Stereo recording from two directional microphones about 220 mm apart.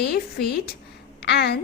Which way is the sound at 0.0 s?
45° left (ahead or behind).